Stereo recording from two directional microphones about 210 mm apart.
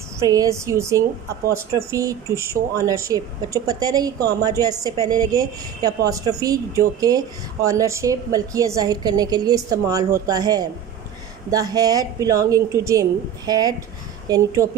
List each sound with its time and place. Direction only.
0.2 s a woman's voice: 15° right (ahead or behind)